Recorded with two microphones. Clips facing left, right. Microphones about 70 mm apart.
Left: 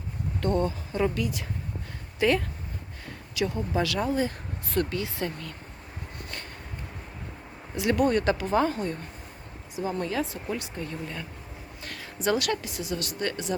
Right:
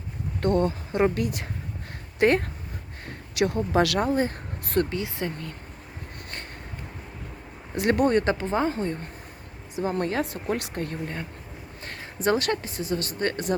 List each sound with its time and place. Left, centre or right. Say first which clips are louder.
0.4 s a woman's voice: right 3 dB; right
3.3 s speech: right 5 dB; right
4.0 s speech: right 3 dB; right
4.9 s speech: right 1 dB; right
7.8 s speech: right 2 dB; right
9.7 s a woman's voice: right 3 dB; right
11.8 s speech: right 3 dB; right